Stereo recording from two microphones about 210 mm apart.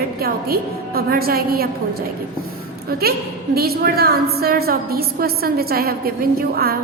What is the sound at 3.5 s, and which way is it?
A woman's voice, 45° right (ahead or behind).